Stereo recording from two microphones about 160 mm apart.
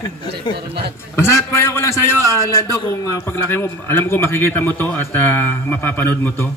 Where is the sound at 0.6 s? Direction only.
90° right.